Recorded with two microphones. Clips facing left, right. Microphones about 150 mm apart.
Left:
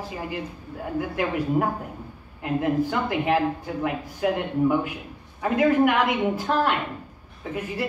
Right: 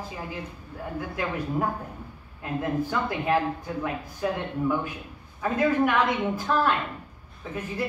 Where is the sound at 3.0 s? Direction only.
15° left (ahead or behind).